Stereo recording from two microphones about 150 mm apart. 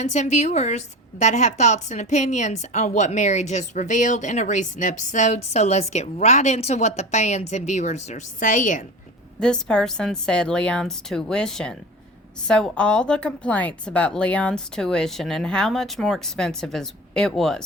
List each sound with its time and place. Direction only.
0.0 s a woman's voice: 50° left (ahead or behind)
9.4 s a woman's voice: 5° left (ahead or behind)